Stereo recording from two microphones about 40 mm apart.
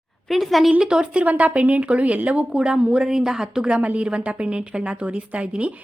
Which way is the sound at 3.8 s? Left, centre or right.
Right.